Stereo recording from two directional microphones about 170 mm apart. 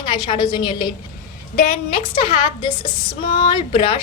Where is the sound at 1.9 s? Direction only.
30° left (ahead or behind).